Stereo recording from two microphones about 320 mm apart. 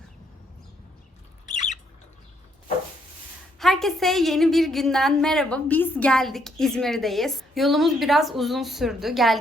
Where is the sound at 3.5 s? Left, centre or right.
Centre.